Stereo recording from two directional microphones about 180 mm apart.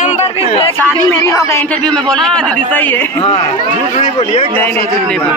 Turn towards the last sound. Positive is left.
turn(degrees=25)  # may be behind; listen again after turning